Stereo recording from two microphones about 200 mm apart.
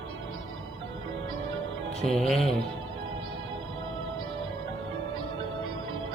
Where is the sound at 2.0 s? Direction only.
5° left (ahead or behind).